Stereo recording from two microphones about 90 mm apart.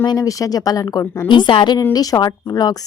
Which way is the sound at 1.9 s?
45° left (ahead or behind).